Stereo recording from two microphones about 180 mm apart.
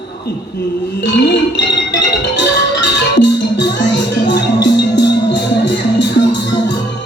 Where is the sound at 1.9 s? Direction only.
75° left (ahead or behind).